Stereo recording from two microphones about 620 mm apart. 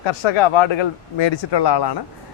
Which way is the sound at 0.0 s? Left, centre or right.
Left.